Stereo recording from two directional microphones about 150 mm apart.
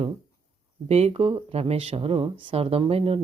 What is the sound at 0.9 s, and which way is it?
Speech, 45° right (ahead or behind).